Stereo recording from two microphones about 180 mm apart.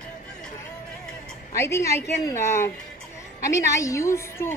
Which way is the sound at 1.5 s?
15° left (ahead or behind).